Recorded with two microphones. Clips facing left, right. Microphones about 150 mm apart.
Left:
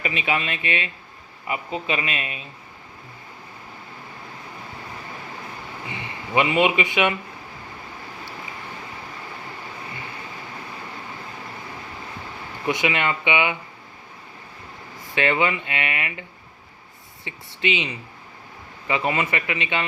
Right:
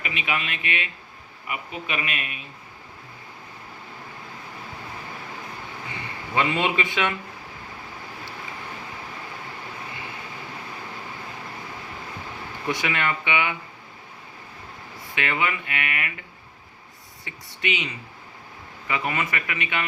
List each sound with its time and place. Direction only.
0.0 s speech: 35° left (ahead or behind)
6.3 s speech: 15° left (ahead or behind)
12.6 s speech: 20° left (ahead or behind)
15.1 s speech: 30° left (ahead or behind)
17.2 s speech: 25° left (ahead or behind)